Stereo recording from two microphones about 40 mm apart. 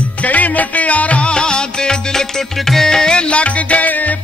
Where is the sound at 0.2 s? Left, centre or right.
Left.